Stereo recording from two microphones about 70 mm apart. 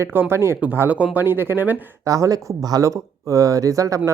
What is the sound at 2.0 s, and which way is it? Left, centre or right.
Speech, right.